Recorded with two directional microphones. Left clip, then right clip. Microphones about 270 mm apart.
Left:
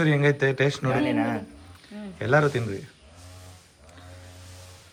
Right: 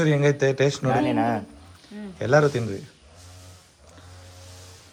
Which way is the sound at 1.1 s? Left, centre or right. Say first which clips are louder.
Right 3 dB; right.